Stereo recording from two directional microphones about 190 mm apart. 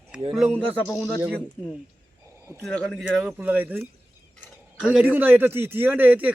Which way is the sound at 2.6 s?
5° left (ahead or behind).